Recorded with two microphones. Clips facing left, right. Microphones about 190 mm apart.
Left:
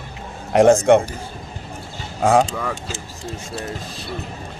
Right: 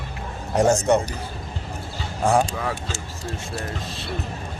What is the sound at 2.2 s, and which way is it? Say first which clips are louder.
Speech: left 4 dB; 90° left.